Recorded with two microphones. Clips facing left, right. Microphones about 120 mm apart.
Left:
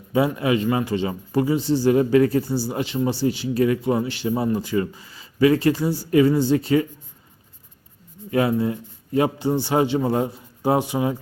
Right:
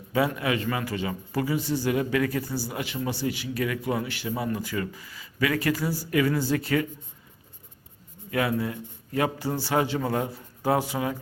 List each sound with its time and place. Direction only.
0.3 s a man's voice: 25° left (ahead or behind)
8.3 s a man's voice: 25° left (ahead or behind)